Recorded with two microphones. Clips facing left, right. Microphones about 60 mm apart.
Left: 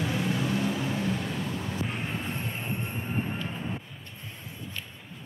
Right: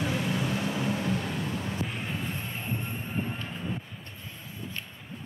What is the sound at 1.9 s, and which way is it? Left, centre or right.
Vehicle, left.